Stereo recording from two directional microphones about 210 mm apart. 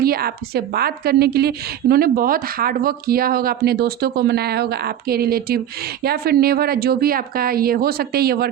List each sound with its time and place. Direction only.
0.0 s a woman's voice: 45° right (ahead or behind)